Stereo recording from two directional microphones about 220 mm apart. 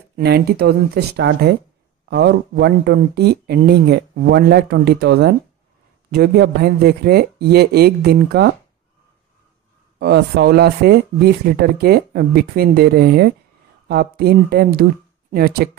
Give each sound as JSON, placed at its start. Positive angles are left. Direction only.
{"t": 0.1, "sound": "speech", "side_deg": -45}
{"t": 9.9, "sound": "speech", "side_deg": -45}